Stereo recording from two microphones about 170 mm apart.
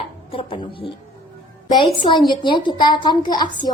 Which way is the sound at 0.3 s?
30° left (ahead or behind).